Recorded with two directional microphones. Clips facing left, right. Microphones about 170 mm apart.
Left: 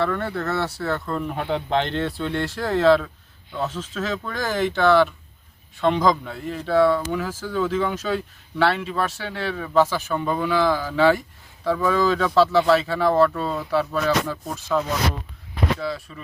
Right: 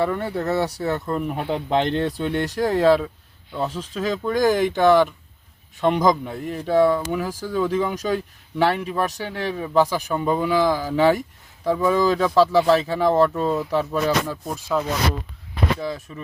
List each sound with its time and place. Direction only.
0.0 s speech: 15° right (ahead or behind)